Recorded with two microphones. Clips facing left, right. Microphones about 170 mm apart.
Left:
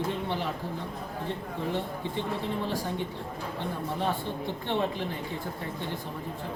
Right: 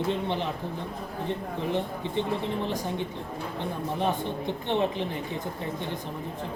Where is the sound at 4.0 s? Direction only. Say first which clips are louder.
Right 4 dB; 20° right (ahead or behind).